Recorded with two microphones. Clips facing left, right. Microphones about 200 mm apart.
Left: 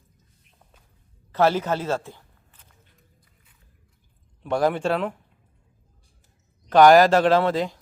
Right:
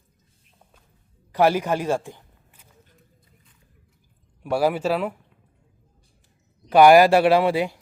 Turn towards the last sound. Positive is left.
turn(degrees=-10)  # may be behind; listen again after turning